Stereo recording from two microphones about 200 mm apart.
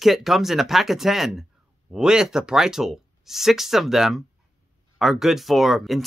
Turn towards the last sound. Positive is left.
turn(degrees=0)  # may be behind; listen again after turning